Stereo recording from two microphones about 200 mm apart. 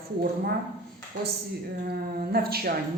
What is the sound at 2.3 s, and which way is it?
Speech, 50° right (ahead or behind).